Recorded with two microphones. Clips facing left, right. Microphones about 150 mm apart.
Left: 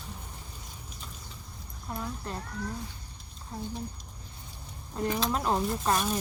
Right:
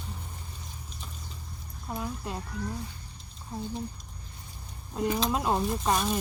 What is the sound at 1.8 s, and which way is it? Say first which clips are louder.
Speech: right 2 dB; 10° right (ahead or behind).